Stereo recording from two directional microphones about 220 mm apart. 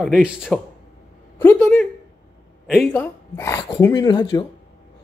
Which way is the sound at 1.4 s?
10° left (ahead or behind).